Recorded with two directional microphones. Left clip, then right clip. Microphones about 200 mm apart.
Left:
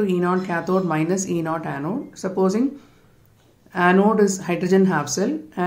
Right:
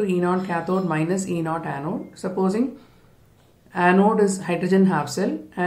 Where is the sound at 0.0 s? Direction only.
20° left (ahead or behind).